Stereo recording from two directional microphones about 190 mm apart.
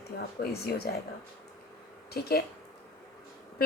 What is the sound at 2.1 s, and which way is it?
Speech, 55° left (ahead or behind).